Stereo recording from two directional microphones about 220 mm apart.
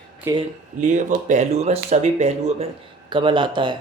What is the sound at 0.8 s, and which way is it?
A man's voice, 35° right (ahead or behind).